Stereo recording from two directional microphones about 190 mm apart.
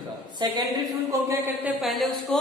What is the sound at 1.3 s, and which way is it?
Speech, 10° right (ahead or behind).